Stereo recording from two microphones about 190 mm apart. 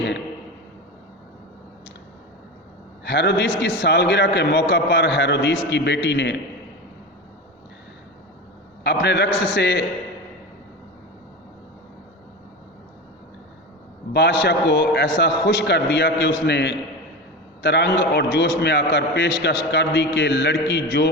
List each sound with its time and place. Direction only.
3.0 s a man's voice: 60° left (ahead or behind)
8.8 s a man's voice: 65° left (ahead or behind)
14.1 s a man's voice: 65° left (ahead or behind)